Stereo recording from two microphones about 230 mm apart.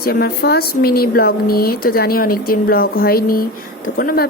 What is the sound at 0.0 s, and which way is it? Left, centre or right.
Speech, left.